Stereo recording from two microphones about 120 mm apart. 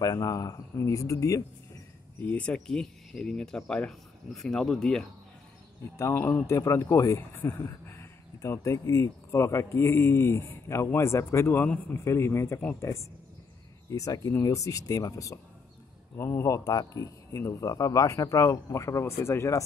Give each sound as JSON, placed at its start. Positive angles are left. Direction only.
{"t": 0.0, "sound": "speech", "side_deg": 30}
{"t": 2.1, "sound": "speech", "side_deg": 10}
{"t": 5.9, "sound": "speech", "side_deg": 20}